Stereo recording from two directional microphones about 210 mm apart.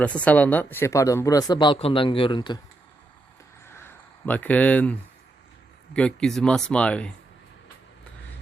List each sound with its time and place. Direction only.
0.0 s speech: 5° left (ahead or behind); by 2.6 s 20° left (ahead or behind)
3.7 s a sound: 10° left (ahead or behind)
5.9 s speech: 5° left (ahead or behind)